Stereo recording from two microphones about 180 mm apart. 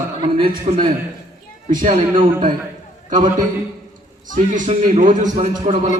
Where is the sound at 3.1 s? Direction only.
45° right (ahead or behind).